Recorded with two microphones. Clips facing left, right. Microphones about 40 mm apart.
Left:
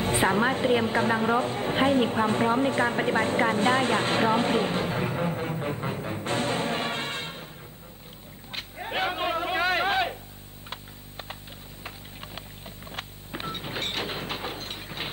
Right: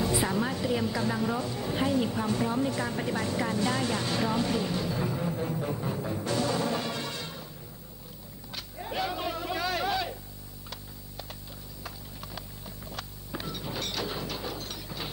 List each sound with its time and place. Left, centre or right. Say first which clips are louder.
0.0 s music: left 5 dB; left
8.5 s a sound: left 3 dB; left
11.8 s wood: left 2 dB; left